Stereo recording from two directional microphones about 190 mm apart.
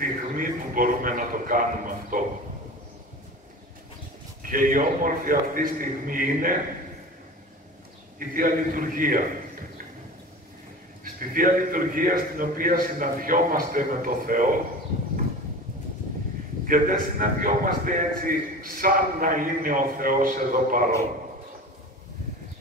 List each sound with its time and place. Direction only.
0.0 s a man's voice: 45° right (ahead or behind)
4.4 s a man's voice: 45° right (ahead or behind)
8.2 s a man's voice: 45° right (ahead or behind)
11.1 s a man's voice: 45° right (ahead or behind)
16.6 s a man's voice: 45° right (ahead or behind)